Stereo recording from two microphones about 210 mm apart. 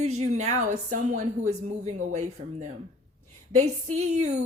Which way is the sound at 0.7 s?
35° right (ahead or behind).